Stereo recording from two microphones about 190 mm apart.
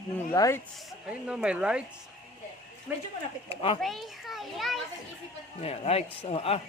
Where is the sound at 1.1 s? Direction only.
5° right (ahead or behind).